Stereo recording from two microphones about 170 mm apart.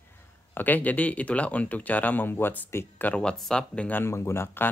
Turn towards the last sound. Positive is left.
turn(degrees=15)  # may be behind; listen again after turning